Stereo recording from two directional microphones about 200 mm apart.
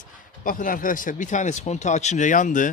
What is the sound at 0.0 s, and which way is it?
Speech, 45° left (ahead or behind).